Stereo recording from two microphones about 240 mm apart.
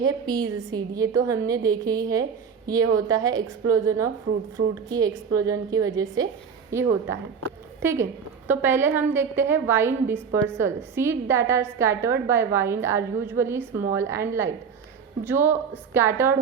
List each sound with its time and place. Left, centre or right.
0.3 s a woman's voice: centre